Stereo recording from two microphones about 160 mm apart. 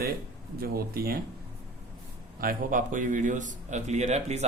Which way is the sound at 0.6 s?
70° right (ahead or behind).